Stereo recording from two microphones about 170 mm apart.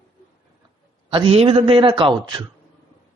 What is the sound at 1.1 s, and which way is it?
A man's voice, 35° right (ahead or behind).